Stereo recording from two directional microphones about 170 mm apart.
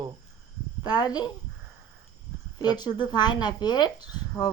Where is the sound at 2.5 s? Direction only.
25° left (ahead or behind).